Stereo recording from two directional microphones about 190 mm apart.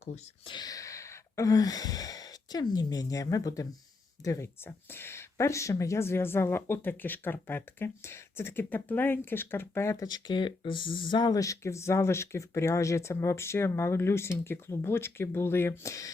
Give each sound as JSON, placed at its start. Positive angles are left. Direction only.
{"t": 0.0, "sound": "speech", "side_deg": 30}